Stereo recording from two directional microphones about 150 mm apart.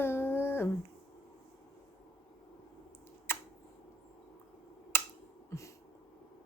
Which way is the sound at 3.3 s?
15° left (ahead or behind).